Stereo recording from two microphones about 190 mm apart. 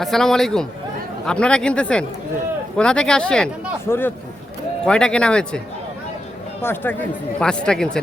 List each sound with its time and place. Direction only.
0.0 s speech: centre (ahead or behind)
6.6 s speech: 10° left (ahead or behind)